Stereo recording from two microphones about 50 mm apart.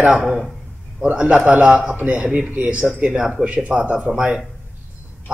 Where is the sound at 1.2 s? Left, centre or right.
Right.